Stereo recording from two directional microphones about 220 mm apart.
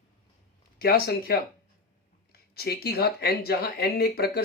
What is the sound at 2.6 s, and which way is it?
Speech, 45° left (ahead or behind).